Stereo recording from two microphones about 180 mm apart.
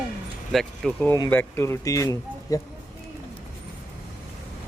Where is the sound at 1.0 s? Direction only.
15° left (ahead or behind).